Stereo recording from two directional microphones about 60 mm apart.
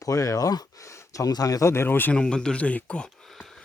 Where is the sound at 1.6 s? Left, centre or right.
Left.